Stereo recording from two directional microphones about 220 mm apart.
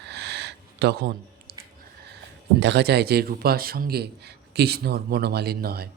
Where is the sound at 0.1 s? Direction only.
50° right (ahead or behind).